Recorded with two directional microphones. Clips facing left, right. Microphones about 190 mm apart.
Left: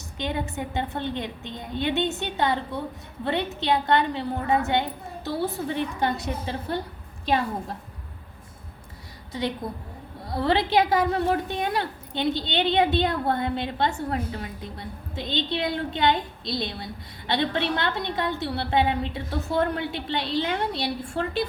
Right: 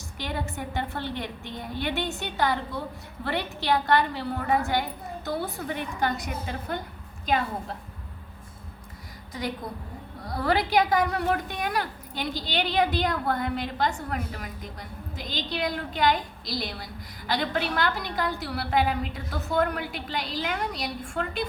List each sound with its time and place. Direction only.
0.2 s a woman's voice: 20° left (ahead or behind)
9.6 s a woman's voice: 25° left (ahead or behind)